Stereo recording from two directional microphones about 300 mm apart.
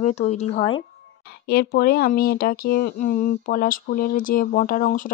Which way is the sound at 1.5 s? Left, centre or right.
Left.